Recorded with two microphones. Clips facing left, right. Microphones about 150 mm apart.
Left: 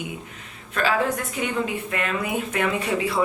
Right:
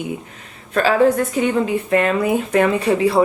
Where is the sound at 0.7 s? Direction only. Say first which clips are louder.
Right 8 dB; 35° right (ahead or behind).